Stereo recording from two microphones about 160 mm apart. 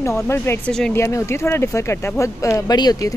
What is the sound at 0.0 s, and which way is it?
Speech, 15° left (ahead or behind).